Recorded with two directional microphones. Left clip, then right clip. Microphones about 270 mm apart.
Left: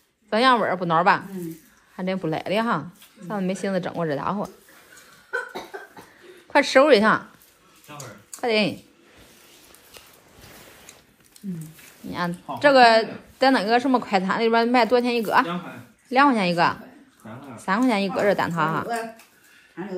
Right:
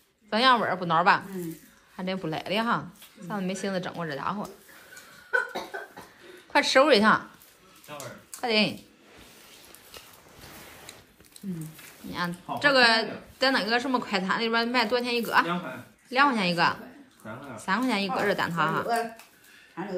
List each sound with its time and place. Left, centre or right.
0.3 s a woman's voice: centre
6.5 s a woman's voice: centre
8.4 s a woman's voice: centre
12.1 s a woman's voice: centre